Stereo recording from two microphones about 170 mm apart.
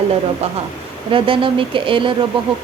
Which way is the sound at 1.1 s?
30° right (ahead or behind).